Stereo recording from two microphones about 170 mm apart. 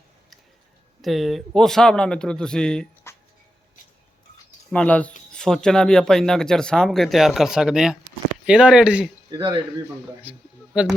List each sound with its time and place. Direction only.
1.0 s speech: centre (ahead or behind)
3.1 s a sound: 15° left (ahead or behind)
4.7 s speech: 10° left (ahead or behind)
5.3 s a sound: 5° left (ahead or behind)
5.6 s speech: 5° left (ahead or behind)
9.3 s speech: 25° right (ahead or behind)
10.3 s speech: 10° right (ahead or behind)